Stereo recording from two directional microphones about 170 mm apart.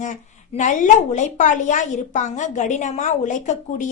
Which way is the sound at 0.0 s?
45° left (ahead or behind).